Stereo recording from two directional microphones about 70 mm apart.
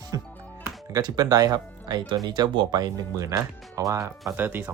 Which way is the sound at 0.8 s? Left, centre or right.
Right.